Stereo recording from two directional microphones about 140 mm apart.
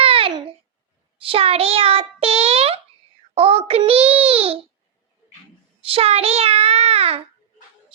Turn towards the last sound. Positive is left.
turn(degrees=-45)  # may be behind; listen again after turning